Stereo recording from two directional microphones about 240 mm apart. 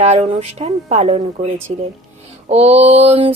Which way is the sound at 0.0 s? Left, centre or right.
Right.